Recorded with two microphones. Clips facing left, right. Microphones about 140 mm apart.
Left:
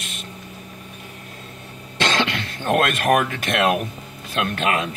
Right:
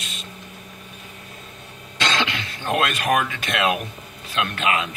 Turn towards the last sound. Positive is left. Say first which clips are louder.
# left 1 dB
turn(degrees=45)  # may be behind; listen again after turning